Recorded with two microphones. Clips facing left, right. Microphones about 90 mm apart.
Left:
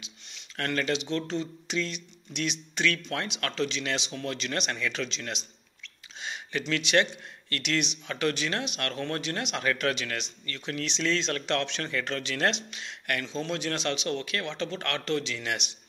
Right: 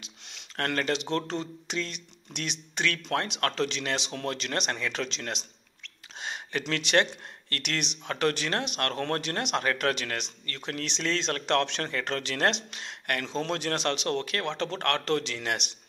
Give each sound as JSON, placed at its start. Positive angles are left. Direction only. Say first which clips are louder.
{"t": 0.6, "sound": "speech", "louder": "even", "side_deg": -45}
{"t": 6.2, "sound": "a sound", "louder": "even", "side_deg": -40}
{"t": 6.7, "sound": "speech", "louder": "even", "side_deg": -40}
{"t": 9.6, "sound": "speech", "louder": "even", "side_deg": -40}
{"t": 14.6, "sound": "speech", "louder": "right 3 dB", "side_deg": -50}